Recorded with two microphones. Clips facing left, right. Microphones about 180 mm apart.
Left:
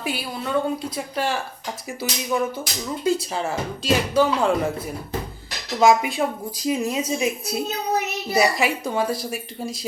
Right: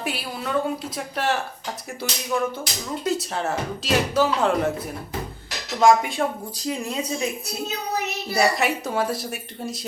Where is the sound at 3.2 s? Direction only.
Centre (ahead or behind).